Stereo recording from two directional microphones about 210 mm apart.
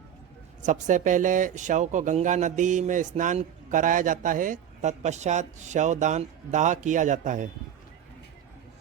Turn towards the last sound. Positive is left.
turn(degrees=-35)  # may be behind; listen again after turning